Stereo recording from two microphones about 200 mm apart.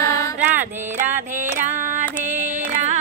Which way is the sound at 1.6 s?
40° right (ahead or behind).